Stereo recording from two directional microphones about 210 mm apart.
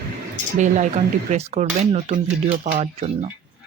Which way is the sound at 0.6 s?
35° right (ahead or behind).